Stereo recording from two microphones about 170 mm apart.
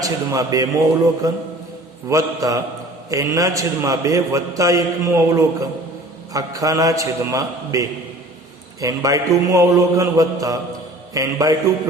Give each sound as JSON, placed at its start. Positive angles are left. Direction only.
{"t": 0.0, "sound": "a man's voice", "side_deg": -20}